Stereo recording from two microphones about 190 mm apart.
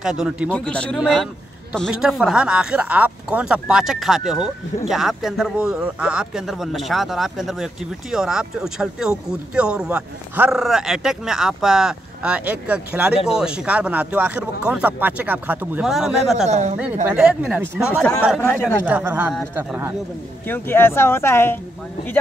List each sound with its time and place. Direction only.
0.0 s speech: 5° right (ahead or behind)
16.4 s a woman's voice: 35° right (ahead or behind)
17.0 s speech: 5° right (ahead or behind)
20.4 s speech: 10° left (ahead or behind)